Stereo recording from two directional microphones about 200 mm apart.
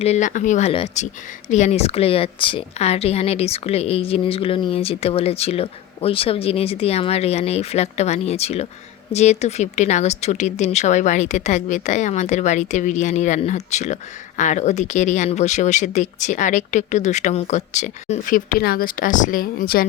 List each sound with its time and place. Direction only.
0.0 s speech: 35° left (ahead or behind)